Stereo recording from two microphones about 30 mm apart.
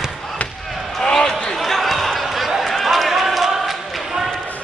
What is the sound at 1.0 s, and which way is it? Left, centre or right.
Basketball bounce, centre.